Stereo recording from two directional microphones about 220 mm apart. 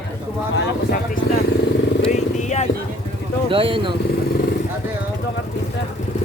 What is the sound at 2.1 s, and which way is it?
Speech, 30° left (ahead or behind).